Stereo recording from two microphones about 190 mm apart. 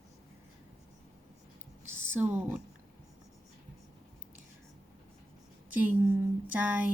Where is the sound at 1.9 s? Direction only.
10° right (ahead or behind).